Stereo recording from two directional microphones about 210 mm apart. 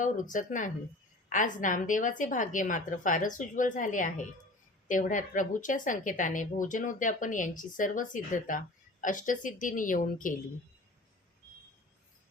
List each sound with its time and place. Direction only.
0.0 s a woman's voice: 40° left (ahead or behind)